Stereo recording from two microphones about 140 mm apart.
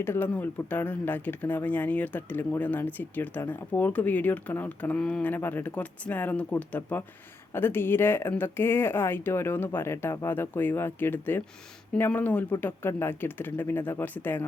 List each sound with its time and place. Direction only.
0.0 s speech: 15° left (ahead or behind)